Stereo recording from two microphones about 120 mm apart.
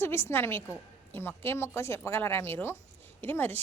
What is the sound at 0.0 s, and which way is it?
A woman's voice, 20° left (ahead or behind).